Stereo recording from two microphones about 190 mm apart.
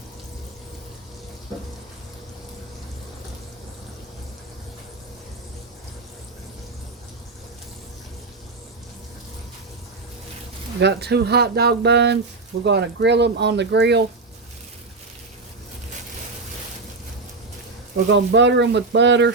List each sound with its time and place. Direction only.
10.8 s speech: 60° right (ahead or behind)
18.1 s speech: 70° right (ahead or behind)